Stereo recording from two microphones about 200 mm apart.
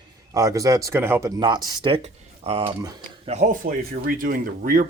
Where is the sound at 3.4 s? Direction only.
40° right (ahead or behind).